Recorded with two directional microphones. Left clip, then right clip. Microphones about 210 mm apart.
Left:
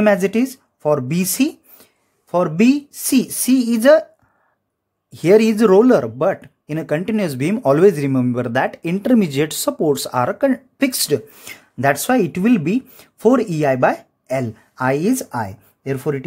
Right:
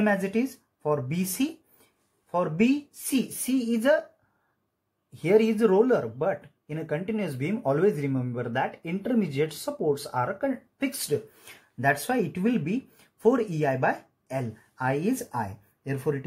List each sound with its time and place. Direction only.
0.0 s speech: 50° left (ahead or behind)
5.2 s speech: 55° left (ahead or behind)